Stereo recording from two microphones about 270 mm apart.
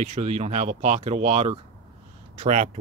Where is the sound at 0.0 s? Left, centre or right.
Right.